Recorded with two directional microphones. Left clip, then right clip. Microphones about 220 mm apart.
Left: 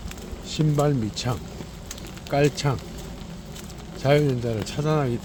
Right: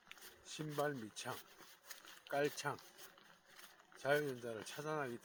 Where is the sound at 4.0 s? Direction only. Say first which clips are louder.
Left 17 dB; 15° right (ahead or behind).